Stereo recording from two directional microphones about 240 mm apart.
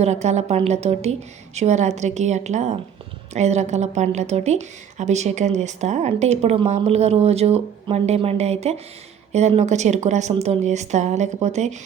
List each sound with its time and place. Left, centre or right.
0.0 s speech: right